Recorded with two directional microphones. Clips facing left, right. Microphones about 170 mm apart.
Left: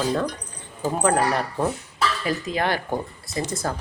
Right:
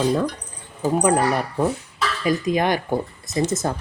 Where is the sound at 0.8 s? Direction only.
15° right (ahead or behind).